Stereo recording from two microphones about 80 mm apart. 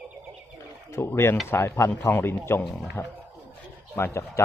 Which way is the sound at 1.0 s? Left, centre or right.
Left.